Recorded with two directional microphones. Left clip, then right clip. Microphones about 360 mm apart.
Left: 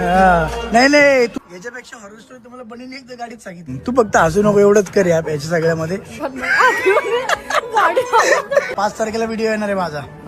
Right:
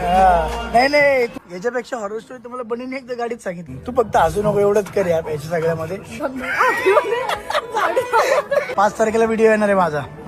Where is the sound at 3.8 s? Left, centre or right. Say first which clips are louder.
Left 2 dB; left.